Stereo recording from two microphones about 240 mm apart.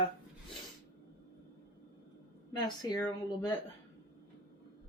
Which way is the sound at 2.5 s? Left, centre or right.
Centre.